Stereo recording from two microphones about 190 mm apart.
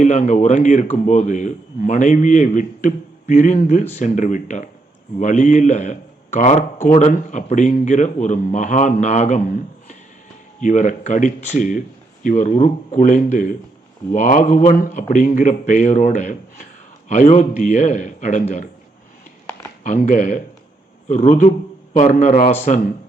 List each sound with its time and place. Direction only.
0.0 s speech: 40° left (ahead or behind)
19.8 s speech: 40° left (ahead or behind)